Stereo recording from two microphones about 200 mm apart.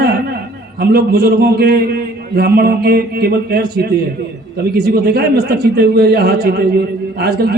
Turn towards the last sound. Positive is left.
turn(degrees=-50)  # may be behind; listen again after turning